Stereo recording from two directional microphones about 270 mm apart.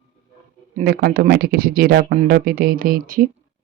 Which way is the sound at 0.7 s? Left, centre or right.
Right.